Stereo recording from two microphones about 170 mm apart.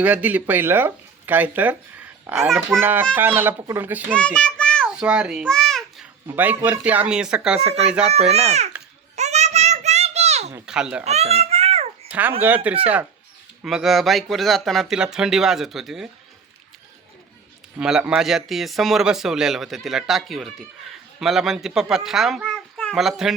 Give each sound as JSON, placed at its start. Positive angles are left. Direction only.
{"t": 0.0, "sound": "speech", "side_deg": -10}
{"t": 4.1, "sound": "a sound", "side_deg": 5}
{"t": 4.9, "sound": "babbling", "side_deg": -5}
{"t": 6.2, "sound": "a man's voice", "side_deg": -10}
{"t": 8.3, "sound": "a child's voice", "side_deg": -40}
{"t": 9.1, "sound": "a sound", "side_deg": -40}
{"t": 10.7, "sound": "a man's voice", "side_deg": -5}
{"t": 11.0, "sound": "a child's voice", "side_deg": -40}
{"t": 12.4, "sound": "a man's voice", "side_deg": -10}
{"t": 17.7, "sound": "a man's voice", "side_deg": -5}